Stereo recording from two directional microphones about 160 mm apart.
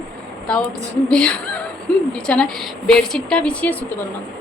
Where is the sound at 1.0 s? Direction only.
5° left (ahead or behind).